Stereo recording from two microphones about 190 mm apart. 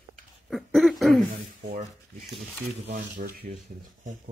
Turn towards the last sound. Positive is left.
turn(degrees=-50)  # may be behind; listen again after turning